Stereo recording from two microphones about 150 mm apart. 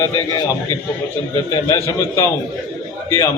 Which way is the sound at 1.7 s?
20° left (ahead or behind).